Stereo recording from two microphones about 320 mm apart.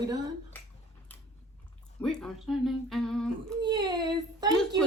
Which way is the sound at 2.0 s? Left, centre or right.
Centre.